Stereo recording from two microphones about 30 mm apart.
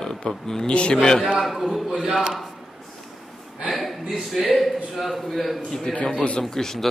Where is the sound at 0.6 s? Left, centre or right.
Left.